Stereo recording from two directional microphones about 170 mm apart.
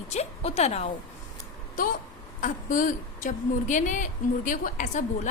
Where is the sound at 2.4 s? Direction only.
50° left (ahead or behind).